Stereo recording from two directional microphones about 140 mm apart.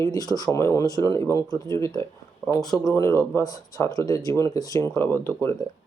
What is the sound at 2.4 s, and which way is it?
Speech, 5° left (ahead or behind).